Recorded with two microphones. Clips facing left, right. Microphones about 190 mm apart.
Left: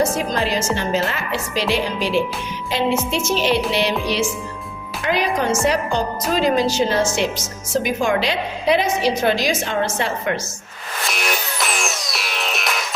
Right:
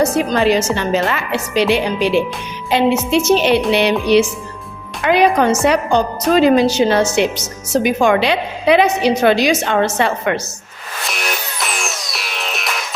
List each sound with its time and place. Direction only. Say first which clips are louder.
0.0 s a woman's voice: right 5 dB; 65° right (ahead or behind)
11.0 s music: even; centre (ahead or behind)